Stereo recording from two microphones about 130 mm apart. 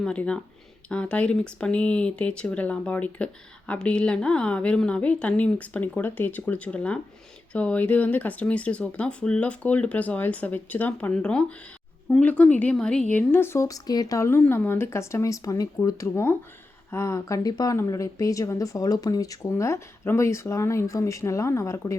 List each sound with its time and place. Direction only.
0.0 s speech: 10° left (ahead or behind)